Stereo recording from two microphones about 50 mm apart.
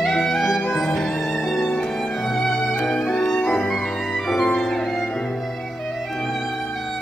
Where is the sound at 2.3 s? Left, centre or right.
Centre.